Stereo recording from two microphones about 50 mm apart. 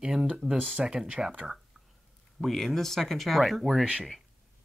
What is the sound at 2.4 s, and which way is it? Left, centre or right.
Speech, centre.